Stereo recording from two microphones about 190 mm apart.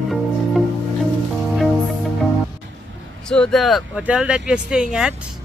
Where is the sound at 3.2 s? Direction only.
5° left (ahead or behind).